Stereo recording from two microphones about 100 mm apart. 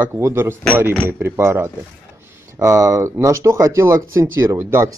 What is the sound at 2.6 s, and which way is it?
Speech, 35° right (ahead or behind).